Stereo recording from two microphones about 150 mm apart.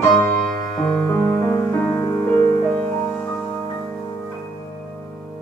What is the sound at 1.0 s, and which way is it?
Music, 15° left (ahead or behind).